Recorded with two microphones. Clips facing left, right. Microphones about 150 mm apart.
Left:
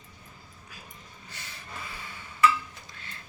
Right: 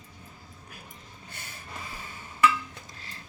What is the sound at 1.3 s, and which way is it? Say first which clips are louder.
Vehicle: right 1 dB; 50° right (ahead or behind).